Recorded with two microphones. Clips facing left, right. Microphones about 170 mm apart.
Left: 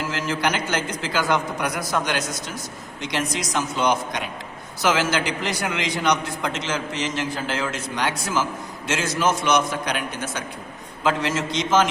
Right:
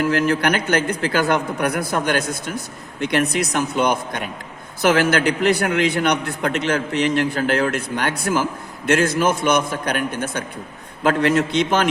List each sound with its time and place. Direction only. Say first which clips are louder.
0.0 s a man's voice: right 6 dB; 60° right (ahead or behind)